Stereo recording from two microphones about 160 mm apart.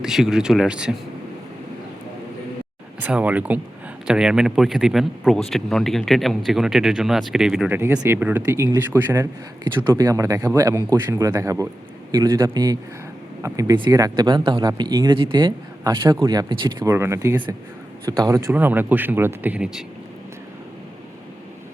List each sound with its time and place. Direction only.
0.0 s speech: 5° right (ahead or behind)
3.0 s speech: 10° right (ahead or behind)